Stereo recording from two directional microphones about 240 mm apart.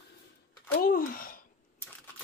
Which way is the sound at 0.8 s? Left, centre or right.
Left.